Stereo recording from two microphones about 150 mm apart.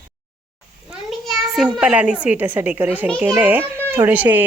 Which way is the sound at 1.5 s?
5° right (ahead or behind).